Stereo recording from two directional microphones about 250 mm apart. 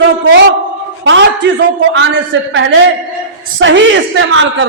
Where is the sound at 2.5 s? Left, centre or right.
Right.